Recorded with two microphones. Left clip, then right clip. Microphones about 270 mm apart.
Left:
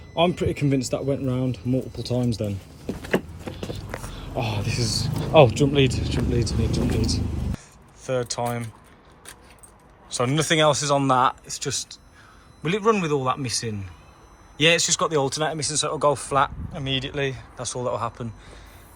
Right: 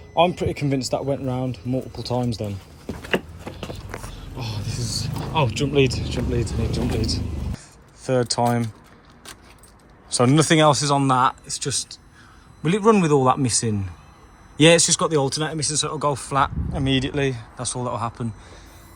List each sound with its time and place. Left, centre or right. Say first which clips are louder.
0.2 s speech: right 3 dB; centre
3.5 s a sound: left 1 dB; centre
4.0 s speech: left 6 dB; centre
8.0 s speech: right 5 dB; right
10.1 s speech: right 5 dB; right
16.7 s speech: right 4 dB; right